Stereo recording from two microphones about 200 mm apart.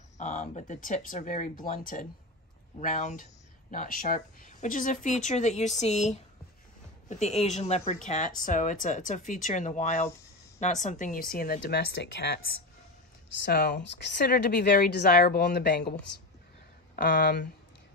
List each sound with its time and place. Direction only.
0.2 s speech: 35° left (ahead or behind)
7.3 s a woman's voice: 35° left (ahead or behind); by 12.4 s 55° left (ahead or behind)
13.5 s a woman's voice: 50° left (ahead or behind)
16.9 s a woman's voice: 50° left (ahead or behind)